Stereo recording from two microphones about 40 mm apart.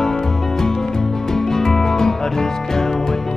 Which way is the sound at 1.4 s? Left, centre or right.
Centre.